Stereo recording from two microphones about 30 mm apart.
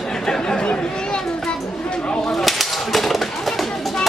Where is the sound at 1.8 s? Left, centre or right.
Left.